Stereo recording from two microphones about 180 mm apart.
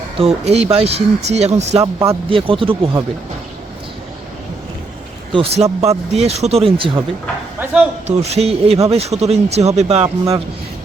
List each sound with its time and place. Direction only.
0.2 s speech: 35° right (ahead or behind)
1.8 s speech: 15° right (ahead or behind)
2.3 s speech: 30° right (ahead or behind)
5.3 s speech: 30° right (ahead or behind)
7.6 s a sound: 10° right (ahead or behind)
8.0 s speech: 35° right (ahead or behind)